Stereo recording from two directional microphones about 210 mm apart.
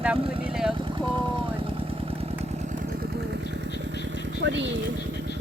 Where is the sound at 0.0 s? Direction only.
5° right (ahead or behind).